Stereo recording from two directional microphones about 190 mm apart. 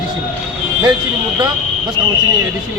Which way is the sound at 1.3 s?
20° right (ahead or behind).